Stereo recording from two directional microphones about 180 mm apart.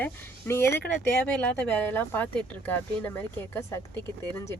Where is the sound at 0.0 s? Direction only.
15° left (ahead or behind).